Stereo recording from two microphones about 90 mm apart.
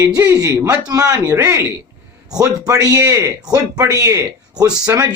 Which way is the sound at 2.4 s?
40° right (ahead or behind).